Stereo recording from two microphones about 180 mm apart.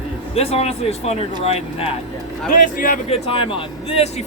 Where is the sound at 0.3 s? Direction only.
35° left (ahead or behind).